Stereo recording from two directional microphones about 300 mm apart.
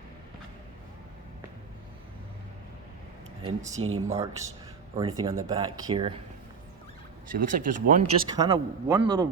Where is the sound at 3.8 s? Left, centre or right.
Right.